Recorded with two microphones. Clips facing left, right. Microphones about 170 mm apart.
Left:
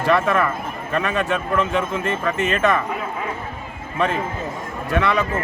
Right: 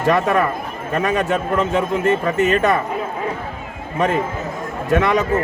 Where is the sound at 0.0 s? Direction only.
40° right (ahead or behind).